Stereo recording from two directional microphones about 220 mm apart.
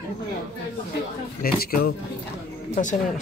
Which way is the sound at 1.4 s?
45° left (ahead or behind).